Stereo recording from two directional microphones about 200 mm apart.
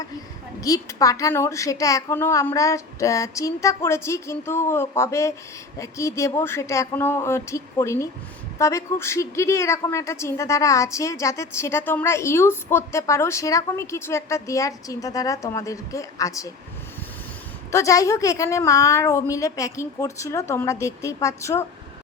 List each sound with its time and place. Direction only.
0.6 s a woman's voice: 15° left (ahead or behind)
17.7 s a woman's voice: 15° left (ahead or behind)